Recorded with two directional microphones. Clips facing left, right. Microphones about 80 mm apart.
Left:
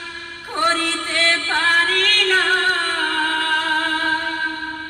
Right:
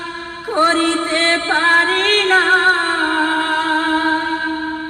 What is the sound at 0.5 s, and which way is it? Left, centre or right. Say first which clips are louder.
Music: right 6 dB; right.